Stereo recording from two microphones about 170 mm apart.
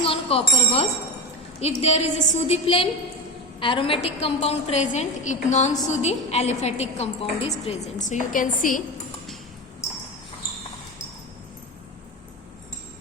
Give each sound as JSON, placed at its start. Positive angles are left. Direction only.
{"t": 0.0, "sound": "bell", "side_deg": 35}
{"t": 1.6, "sound": "a woman's voice", "side_deg": 40}